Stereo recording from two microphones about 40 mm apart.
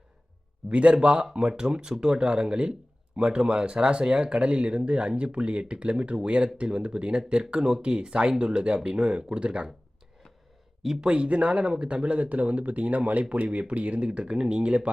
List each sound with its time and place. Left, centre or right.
0.7 s speech: right
11.0 s speech: right